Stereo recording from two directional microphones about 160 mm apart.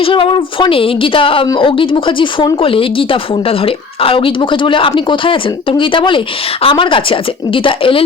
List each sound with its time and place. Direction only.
0.0 s speech: 35° left (ahead or behind)